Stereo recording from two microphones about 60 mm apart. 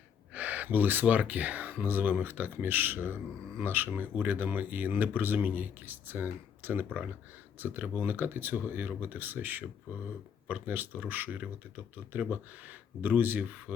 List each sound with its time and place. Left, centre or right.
0.3 s speech: right